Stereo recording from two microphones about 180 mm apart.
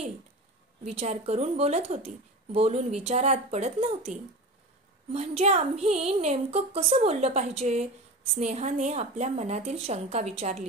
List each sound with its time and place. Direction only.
0.8 s a woman's voice: 35° right (ahead or behind)